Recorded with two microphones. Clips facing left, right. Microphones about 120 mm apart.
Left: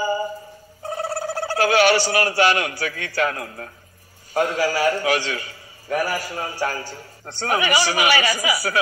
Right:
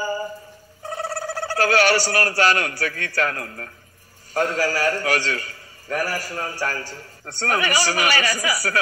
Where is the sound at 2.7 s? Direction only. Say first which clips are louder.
Right 1 dB; 40° right (ahead or behind).